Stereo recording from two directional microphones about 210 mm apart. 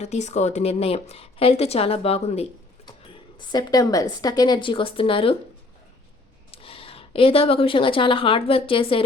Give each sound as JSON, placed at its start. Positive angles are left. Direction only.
{"t": 0.0, "sound": "a woman's voice", "side_deg": 35}
{"t": 3.5, "sound": "a woman's voice", "side_deg": 20}
{"t": 6.5, "sound": "speech", "side_deg": 25}